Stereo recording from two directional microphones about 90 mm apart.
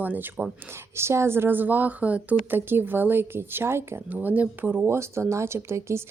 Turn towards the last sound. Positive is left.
turn(degrees=-30)  # may be behind; listen again after turning